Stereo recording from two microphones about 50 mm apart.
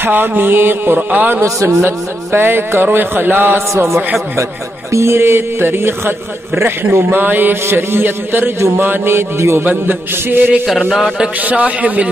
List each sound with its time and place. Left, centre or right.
0.0 s a man's voice: right
3.5 s a man's voice: right
4.9 s a man's voice: right
9.6 s a man's voice: right
11.4 s a man's voice: right